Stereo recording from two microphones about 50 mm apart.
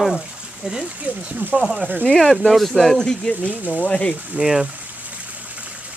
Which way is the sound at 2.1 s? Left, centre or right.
Centre.